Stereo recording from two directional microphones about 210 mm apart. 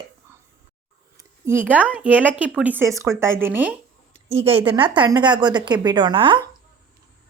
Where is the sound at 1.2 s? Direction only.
10° right (ahead or behind).